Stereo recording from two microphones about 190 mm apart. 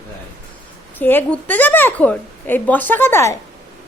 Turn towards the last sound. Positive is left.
turn(degrees=10)  # may be behind; listen again after turning